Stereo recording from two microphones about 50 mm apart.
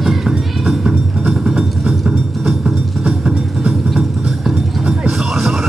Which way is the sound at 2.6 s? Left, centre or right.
Centre.